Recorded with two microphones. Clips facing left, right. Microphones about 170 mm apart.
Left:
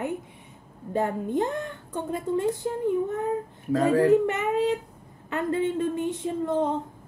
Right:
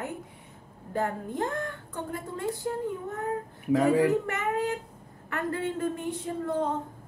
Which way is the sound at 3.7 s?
15° right (ahead or behind).